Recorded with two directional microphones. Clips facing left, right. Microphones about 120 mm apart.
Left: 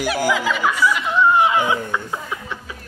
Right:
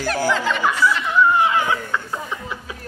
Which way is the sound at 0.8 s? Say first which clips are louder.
Even; 15° left (ahead or behind).